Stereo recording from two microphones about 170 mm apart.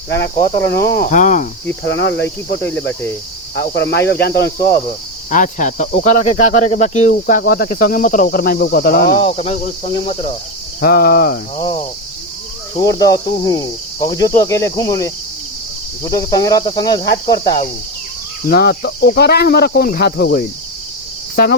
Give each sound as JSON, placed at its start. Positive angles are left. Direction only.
{"t": 0.8, "sound": "speech", "side_deg": 70}
{"t": 1.1, "sound": "speech", "side_deg": 50}
{"t": 1.8, "sound": "cricket", "side_deg": 90}
{"t": 3.8, "sound": "speech", "side_deg": 85}
{"t": 5.3, "sound": "speech", "side_deg": 50}
{"t": 9.3, "sound": "cricket", "side_deg": 40}
{"t": 10.8, "sound": "speech", "side_deg": 60}
{"t": 12.8, "sound": "cricket", "side_deg": 20}
{"t": 18.4, "sound": "speech", "side_deg": 60}